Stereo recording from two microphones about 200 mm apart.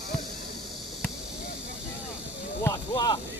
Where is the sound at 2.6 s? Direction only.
20° left (ahead or behind).